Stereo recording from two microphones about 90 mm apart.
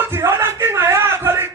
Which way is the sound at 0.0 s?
25° right (ahead or behind).